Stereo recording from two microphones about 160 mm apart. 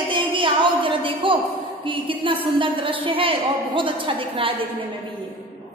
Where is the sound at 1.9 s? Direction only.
30° right (ahead or behind).